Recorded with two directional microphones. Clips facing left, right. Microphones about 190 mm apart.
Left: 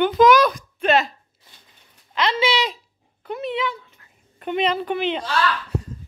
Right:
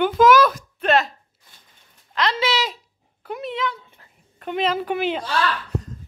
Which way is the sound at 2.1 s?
Centre (ahead or behind).